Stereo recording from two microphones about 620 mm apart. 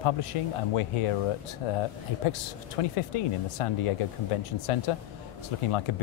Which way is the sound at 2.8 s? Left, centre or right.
Left.